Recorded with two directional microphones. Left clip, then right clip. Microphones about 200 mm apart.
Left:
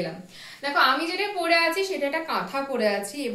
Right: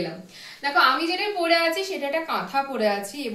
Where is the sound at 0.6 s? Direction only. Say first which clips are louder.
Right 2 dB; 15° left (ahead or behind).